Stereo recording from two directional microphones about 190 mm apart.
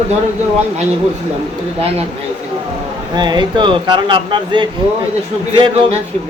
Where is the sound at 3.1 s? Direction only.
25° right (ahead or behind).